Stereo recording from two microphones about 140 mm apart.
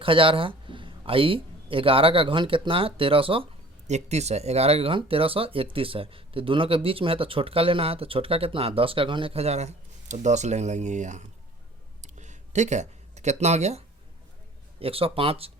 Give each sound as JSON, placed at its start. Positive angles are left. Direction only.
{"t": 0.0, "sound": "speech", "side_deg": -40}
{"t": 3.8, "sound": "speech", "side_deg": -55}
{"t": 12.0, "sound": "a sound", "side_deg": -60}
{"t": 14.8, "sound": "speech", "side_deg": -40}